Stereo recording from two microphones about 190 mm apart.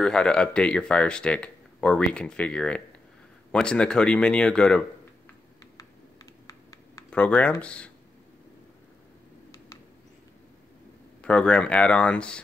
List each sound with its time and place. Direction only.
0.0 s speech: 5° left (ahead or behind)
5.8 s a sound: 15° left (ahead or behind)
7.1 s speech: 5° left (ahead or behind)
11.2 s speech: 5° left (ahead or behind)